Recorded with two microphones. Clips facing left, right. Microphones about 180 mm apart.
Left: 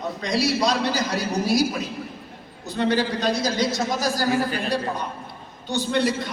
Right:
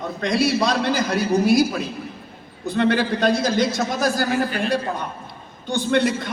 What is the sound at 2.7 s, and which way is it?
A man's voice, 55° right (ahead or behind).